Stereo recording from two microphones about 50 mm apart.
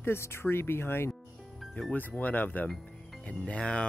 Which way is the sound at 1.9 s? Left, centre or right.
Left.